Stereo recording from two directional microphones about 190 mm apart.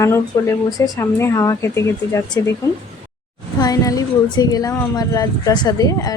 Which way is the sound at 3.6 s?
20° left (ahead or behind).